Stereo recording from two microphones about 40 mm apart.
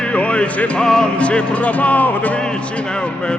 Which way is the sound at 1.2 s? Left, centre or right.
Left.